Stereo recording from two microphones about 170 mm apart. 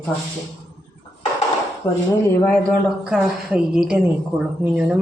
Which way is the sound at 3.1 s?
Centre (ahead or behind).